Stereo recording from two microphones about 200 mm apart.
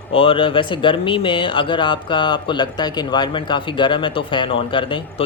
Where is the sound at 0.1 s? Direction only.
25° left (ahead or behind).